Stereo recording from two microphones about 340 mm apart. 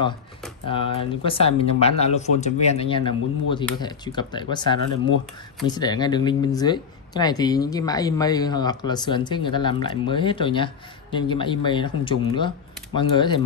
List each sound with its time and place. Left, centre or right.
0.7 s speech: centre